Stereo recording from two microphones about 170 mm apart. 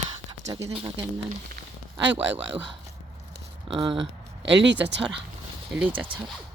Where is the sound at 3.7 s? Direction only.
30° right (ahead or behind).